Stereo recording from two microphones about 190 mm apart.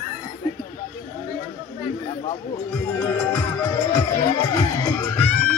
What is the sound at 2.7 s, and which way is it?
Music, 10° left (ahead or behind).